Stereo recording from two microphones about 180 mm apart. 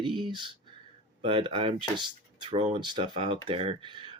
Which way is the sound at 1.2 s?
30° right (ahead or behind).